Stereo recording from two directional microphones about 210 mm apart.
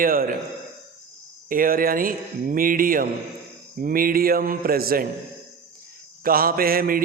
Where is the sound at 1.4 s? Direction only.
40° right (ahead or behind).